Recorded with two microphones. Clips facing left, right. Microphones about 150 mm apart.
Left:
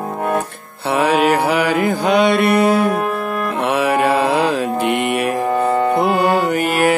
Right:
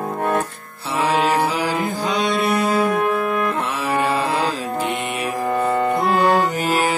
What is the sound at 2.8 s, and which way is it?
Music, 5° left (ahead or behind).